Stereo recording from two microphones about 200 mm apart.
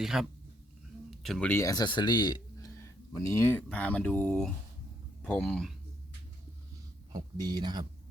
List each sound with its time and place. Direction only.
0.0 s speech: centre (ahead or behind)
7.1 s speech: 20° right (ahead or behind)